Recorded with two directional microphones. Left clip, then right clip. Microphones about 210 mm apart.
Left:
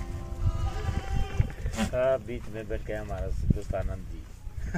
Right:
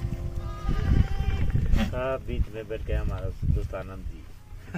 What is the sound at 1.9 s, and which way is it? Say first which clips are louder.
Speech: left 6 dB; 5° right (ahead or behind).